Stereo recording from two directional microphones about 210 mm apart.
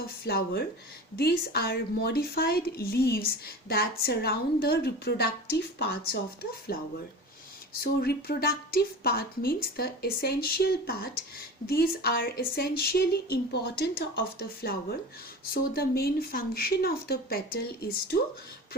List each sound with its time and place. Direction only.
0.0 s speech: 45° left (ahead or behind)